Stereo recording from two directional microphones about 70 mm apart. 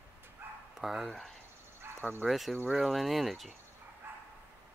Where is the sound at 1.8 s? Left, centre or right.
Right.